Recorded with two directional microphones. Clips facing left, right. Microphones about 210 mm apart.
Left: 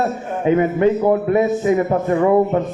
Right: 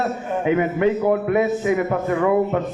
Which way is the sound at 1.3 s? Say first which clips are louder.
Left 3 dB; 40° left (ahead or behind).